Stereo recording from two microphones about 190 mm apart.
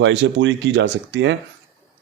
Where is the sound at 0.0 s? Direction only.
70° right (ahead or behind).